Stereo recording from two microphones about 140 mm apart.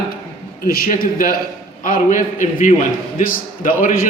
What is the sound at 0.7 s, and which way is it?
Speech, 90° left.